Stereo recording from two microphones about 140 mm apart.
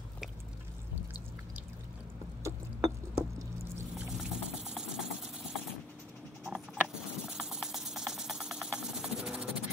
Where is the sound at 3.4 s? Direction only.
20° right (ahead or behind).